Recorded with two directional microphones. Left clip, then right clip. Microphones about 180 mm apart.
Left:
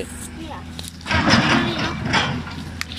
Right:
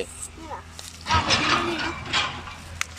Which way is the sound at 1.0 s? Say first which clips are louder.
Left 4 dB; 50° left (ahead or behind).